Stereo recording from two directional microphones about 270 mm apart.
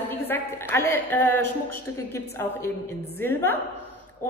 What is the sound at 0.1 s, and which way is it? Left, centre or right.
A woman's voice, centre.